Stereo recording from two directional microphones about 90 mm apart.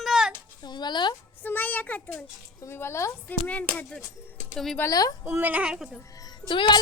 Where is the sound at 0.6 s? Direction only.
55° left (ahead or behind).